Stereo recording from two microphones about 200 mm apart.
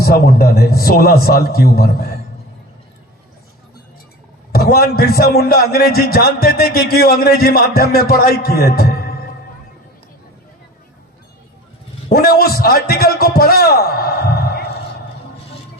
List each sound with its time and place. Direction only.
0.0 s a man's voice: 50° left (ahead or behind)
4.5 s a man's voice: 50° left (ahead or behind)
12.0 s a man's voice: 50° left (ahead or behind)